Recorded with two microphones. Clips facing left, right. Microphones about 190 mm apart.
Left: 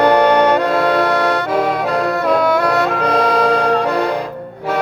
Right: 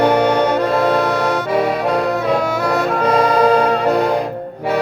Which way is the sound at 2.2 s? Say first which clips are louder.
Left 3 dB; 60° left (ahead or behind).